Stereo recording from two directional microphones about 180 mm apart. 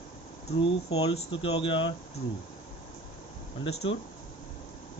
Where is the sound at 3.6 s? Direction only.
30° left (ahead or behind).